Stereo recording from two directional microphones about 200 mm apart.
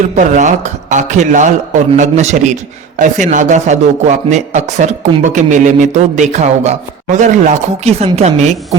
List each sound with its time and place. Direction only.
0.2 s a man's voice: 40° right (ahead or behind)